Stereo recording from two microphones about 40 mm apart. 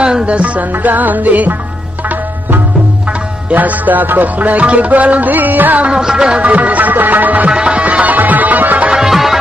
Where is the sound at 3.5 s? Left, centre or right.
Right.